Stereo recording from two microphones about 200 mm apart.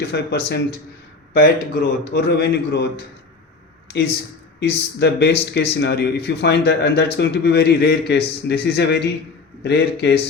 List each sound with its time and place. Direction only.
0.1 s a man's voice: 55° left (ahead or behind)